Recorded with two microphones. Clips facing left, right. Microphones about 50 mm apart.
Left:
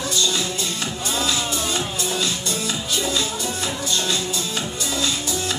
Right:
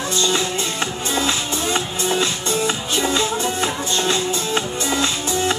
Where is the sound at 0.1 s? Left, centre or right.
Right.